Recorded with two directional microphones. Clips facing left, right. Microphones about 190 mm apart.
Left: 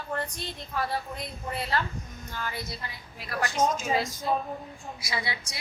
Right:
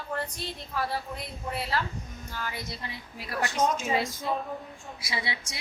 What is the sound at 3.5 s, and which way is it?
Speech, 35° left (ahead or behind).